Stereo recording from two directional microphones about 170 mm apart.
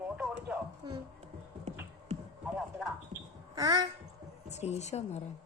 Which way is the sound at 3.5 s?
25° right (ahead or behind).